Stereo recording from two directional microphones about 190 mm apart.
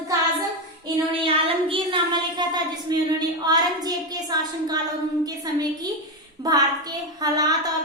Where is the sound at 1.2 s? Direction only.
30° right (ahead or behind).